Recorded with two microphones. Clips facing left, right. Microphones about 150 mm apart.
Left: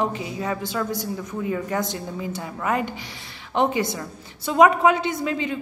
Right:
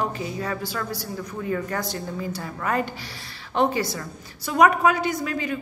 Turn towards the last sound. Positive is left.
turn(degrees=25)  # may be behind; listen again after turning